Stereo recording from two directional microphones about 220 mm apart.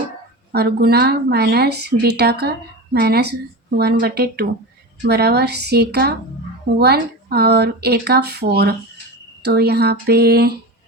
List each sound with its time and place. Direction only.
0.5 s speech: 45° right (ahead or behind)